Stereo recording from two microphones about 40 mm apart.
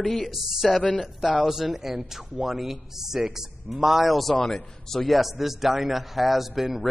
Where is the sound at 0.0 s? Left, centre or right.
Left.